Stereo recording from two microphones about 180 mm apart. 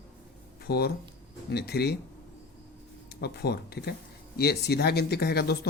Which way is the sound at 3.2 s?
65° left (ahead or behind).